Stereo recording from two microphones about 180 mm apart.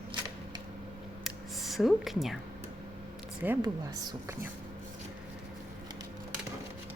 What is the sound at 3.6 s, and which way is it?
Speech, 20° right (ahead or behind).